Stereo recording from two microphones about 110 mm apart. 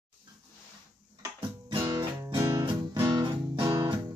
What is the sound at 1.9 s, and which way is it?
Music, 45° right (ahead or behind).